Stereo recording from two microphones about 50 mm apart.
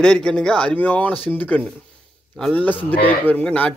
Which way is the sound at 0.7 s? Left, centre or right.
Left.